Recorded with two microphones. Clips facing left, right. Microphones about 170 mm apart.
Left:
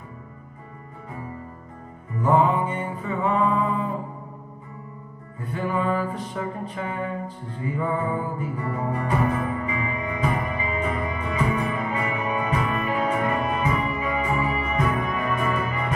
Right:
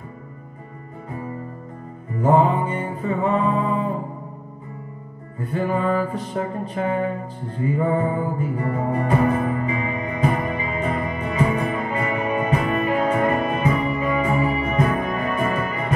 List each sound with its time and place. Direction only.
2.2 s music: 45° right (ahead or behind)
5.5 s music: 40° right (ahead or behind)